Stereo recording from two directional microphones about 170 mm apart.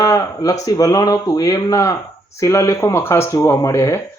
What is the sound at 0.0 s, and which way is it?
Speech, 20° left (ahead or behind).